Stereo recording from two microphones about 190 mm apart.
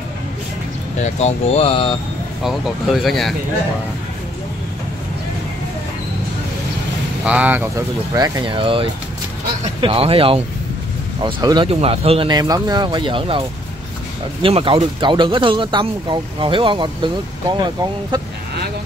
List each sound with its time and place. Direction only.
0.9 s speech: 35° left (ahead or behind)
2.4 s speech: centre (ahead or behind)
7.2 s speech: 10° right (ahead or behind); by 13.4 s 25° right (ahead or behind)
14.4 s speech: 25° right (ahead or behind)